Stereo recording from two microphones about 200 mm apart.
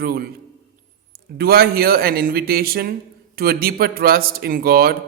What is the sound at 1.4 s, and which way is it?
A man's voice, 50° right (ahead or behind).